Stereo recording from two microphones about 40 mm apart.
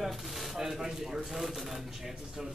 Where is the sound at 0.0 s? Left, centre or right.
Centre.